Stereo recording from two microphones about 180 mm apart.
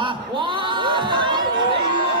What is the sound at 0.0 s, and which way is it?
Chatter, 25° right (ahead or behind).